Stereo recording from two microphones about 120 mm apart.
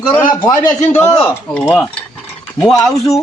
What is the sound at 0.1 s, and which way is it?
Speech, 35° left (ahead or behind).